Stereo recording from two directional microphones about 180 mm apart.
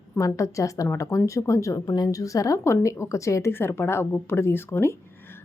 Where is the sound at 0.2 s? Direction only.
15° left (ahead or behind).